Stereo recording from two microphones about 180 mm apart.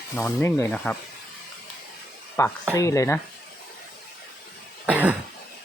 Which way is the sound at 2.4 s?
15° left (ahead or behind).